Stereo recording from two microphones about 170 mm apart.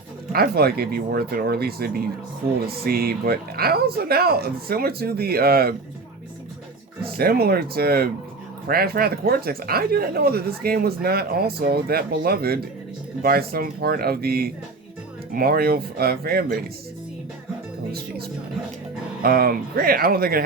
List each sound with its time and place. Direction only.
0.3 s speech: 65° right (ahead or behind)
7.0 s speech: 65° right (ahead or behind)
19.2 s speech: 60° right (ahead or behind)